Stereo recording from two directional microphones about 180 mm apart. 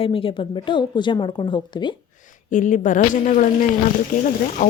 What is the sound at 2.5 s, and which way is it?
Speech, 45° left (ahead or behind).